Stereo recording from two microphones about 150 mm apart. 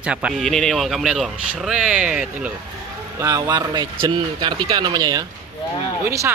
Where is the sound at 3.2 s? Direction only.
20° right (ahead or behind).